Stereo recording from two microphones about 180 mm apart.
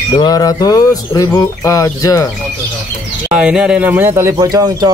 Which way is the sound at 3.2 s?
5° right (ahead or behind).